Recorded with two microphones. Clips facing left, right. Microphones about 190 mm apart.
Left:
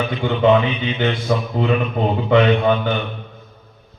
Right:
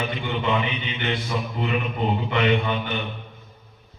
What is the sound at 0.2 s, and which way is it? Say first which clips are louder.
A man's voice: left 12 dB; 90° left.